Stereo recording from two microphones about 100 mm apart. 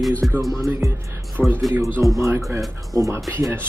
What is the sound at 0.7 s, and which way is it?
Speech, 25° right (ahead or behind).